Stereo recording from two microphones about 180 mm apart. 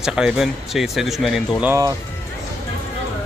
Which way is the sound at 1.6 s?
15° right (ahead or behind).